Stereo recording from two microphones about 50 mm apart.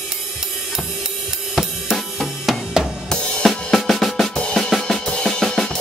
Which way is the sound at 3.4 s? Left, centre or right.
Centre.